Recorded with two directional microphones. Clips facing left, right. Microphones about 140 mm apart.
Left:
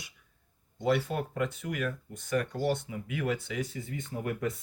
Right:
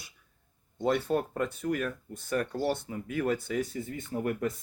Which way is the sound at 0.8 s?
40° right (ahead or behind).